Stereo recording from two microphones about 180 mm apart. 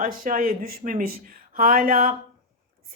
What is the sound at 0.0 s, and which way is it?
A woman's voice, 50° right (ahead or behind).